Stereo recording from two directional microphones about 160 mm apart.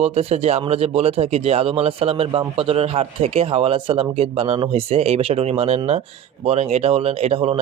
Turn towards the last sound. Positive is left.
turn(degrees=-35)  # may be behind; listen again after turning